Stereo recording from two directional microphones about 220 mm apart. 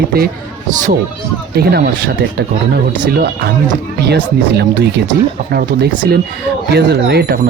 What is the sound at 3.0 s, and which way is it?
Speech, 45° right (ahead or behind).